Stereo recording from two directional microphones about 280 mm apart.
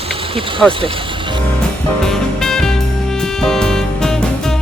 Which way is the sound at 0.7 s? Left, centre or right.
Centre.